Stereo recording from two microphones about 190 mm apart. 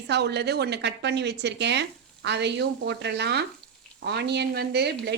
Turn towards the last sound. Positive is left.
turn(degrees=-60)  # may be behind; listen again after turning